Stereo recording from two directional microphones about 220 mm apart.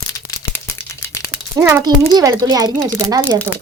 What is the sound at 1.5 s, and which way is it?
Speech, 5° right (ahead or behind).